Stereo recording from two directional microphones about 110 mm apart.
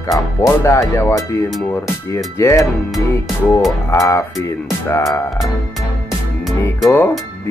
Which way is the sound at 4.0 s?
30° left (ahead or behind).